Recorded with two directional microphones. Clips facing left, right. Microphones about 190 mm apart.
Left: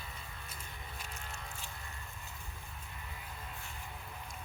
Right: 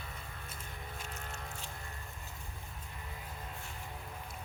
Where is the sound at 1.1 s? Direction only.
45° right (ahead or behind).